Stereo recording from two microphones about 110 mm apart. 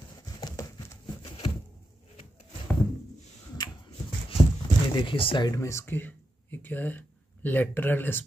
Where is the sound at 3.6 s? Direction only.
40° left (ahead or behind).